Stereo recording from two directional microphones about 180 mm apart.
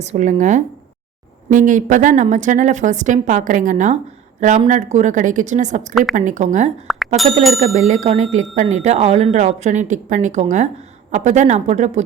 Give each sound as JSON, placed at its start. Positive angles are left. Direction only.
{"t": 0.0, "sound": "a woman's voice", "side_deg": -40}
{"t": 6.9, "sound": "bicycle bell", "side_deg": 0}
{"t": 7.6, "sound": "speech", "side_deg": -40}